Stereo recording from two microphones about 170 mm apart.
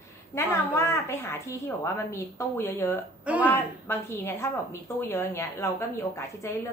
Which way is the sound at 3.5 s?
15° left (ahead or behind).